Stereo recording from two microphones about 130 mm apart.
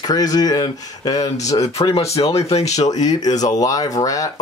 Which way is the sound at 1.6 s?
50° left (ahead or behind).